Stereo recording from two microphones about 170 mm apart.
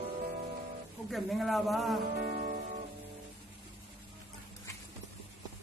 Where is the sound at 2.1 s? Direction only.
60° right (ahead or behind).